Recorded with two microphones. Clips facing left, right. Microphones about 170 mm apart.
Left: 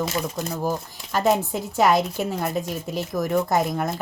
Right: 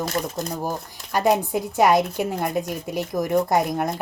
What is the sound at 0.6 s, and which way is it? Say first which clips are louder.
Speech: left 2 dB; 15° right (ahead or behind).